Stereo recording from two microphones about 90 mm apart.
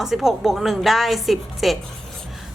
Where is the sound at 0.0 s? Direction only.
5° right (ahead or behind).